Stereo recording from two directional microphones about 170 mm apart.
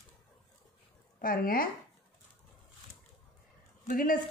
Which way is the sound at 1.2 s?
55° left (ahead or behind).